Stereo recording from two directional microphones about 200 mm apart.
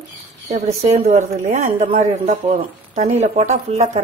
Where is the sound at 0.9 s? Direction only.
35° right (ahead or behind).